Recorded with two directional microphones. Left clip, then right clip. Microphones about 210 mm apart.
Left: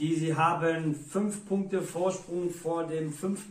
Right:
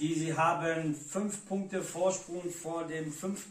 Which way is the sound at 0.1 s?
Centre (ahead or behind).